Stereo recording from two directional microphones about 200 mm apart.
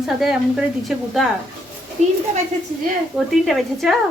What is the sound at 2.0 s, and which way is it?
Speech, 35° right (ahead or behind).